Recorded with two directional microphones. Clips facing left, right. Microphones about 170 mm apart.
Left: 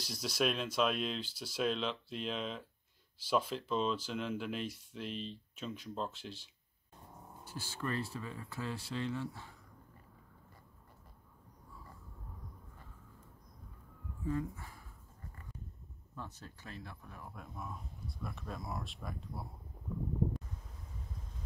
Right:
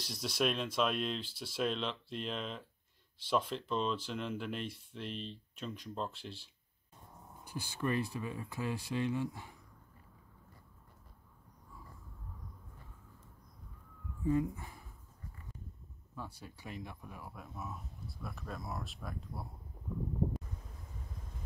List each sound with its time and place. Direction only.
0.0 s speech: centre (ahead or behind)
7.4 s speech: 15° right (ahead or behind)
14.2 s speech: 15° right (ahead or behind)
16.2 s speech: 10° right (ahead or behind)